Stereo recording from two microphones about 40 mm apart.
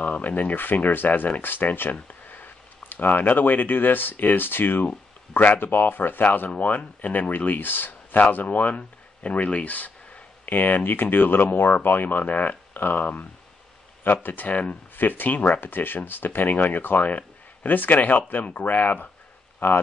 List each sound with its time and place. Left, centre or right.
0.0 s speech: left
8.5 s speech: left
15.0 s speech: left
15.6 s speech: left